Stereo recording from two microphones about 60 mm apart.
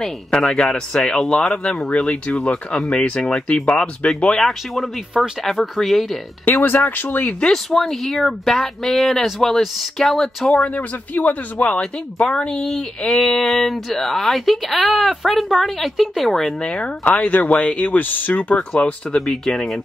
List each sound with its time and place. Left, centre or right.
0.0 s speech: centre
2.0 s speech: left
4.1 s speech: centre
6.4 s speech: left
7.5 s speech: centre
10.6 s speech: left; by 16.5 s centre
16.6 s speech: centre
17.0 s speech: left
19.1 s speech: centre